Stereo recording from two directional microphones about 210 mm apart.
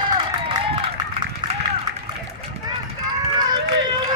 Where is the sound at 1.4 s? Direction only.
20° right (ahead or behind).